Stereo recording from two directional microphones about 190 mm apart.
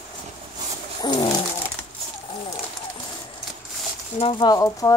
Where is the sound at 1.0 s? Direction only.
25° left (ahead or behind).